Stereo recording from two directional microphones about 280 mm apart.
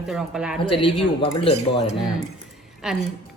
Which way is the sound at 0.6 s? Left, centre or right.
Centre.